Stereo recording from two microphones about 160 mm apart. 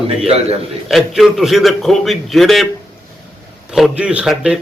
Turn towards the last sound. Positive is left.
turn(degrees=-5)  # may be behind; listen again after turning